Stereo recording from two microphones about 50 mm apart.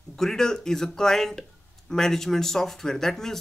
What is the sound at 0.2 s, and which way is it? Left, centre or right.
Speech, centre.